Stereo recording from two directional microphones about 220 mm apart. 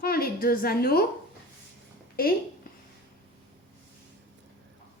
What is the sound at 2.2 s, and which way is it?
Speech, 40° left (ahead or behind).